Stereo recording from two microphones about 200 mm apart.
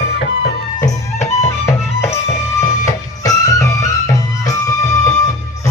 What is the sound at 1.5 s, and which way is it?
Music, 15° left (ahead or behind).